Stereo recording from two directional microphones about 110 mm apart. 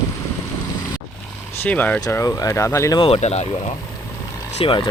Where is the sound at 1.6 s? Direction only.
15° left (ahead or behind).